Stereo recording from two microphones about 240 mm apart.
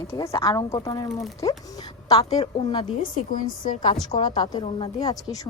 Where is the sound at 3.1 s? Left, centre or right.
Left.